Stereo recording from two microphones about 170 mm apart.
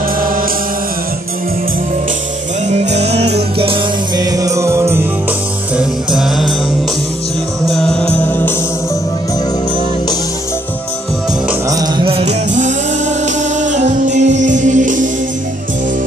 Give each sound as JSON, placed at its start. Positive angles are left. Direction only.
{"t": 2.7, "sound": "music", "side_deg": -40}
{"t": 4.2, "sound": "music", "side_deg": -20}
{"t": 5.8, "sound": "music", "side_deg": 0}
{"t": 7.7, "sound": "music", "side_deg": 5}
{"t": 11.7, "sound": "music", "side_deg": -25}
{"t": 13.2, "sound": "music", "side_deg": -45}